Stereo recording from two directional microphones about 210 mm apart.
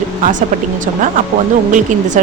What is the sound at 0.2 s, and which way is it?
Speech, 35° right (ahead or behind).